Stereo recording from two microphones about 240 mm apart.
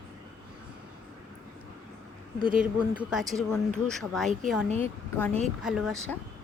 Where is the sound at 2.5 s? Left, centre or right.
Centre.